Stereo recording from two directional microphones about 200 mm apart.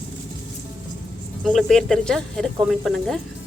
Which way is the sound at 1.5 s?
Centre (ahead or behind).